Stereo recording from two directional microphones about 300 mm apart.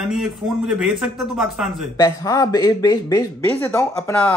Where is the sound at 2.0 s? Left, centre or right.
Centre.